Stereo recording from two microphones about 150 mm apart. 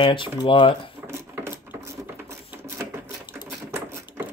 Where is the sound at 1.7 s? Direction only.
20° right (ahead or behind).